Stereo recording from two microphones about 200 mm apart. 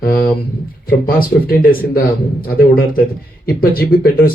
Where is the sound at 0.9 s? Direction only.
50° left (ahead or behind).